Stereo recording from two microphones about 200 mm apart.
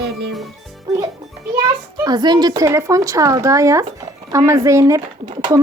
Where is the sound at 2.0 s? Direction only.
20° right (ahead or behind).